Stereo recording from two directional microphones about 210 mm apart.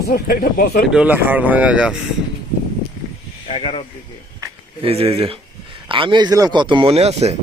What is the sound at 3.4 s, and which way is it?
Speech, 25° left (ahead or behind).